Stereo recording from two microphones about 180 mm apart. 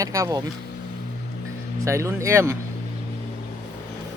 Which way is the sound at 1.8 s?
15° right (ahead or behind).